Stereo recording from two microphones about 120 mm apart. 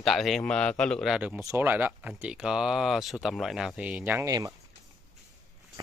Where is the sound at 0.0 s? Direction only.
Centre (ahead or behind).